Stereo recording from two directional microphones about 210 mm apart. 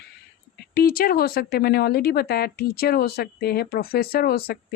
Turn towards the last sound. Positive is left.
turn(degrees=50)  # may be behind; listen again after turning